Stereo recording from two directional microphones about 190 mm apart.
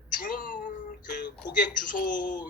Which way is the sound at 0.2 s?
45° left (ahead or behind).